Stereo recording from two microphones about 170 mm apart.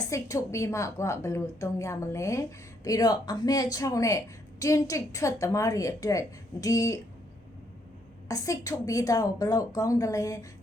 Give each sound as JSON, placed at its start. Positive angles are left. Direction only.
{"t": 0.1, "sound": "a woman's voice", "side_deg": 20}
{"t": 8.3, "sound": "a woman's voice", "side_deg": 20}